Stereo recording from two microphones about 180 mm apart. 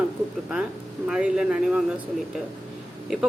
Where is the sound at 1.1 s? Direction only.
5° right (ahead or behind).